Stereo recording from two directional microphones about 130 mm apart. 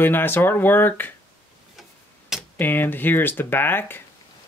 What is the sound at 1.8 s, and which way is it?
Tick-tock, centre (ahead or behind).